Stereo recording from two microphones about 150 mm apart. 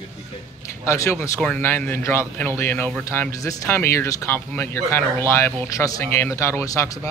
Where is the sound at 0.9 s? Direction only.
15° left (ahead or behind).